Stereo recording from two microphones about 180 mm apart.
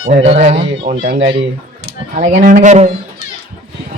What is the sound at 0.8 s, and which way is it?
Speech, 50° right (ahead or behind).